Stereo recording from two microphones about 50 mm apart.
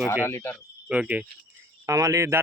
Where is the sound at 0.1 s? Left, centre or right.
Left.